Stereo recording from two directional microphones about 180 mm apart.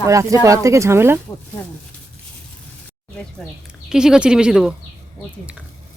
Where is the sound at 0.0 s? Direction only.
15° right (ahead or behind).